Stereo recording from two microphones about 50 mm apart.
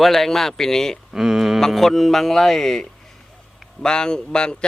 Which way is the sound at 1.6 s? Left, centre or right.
Centre.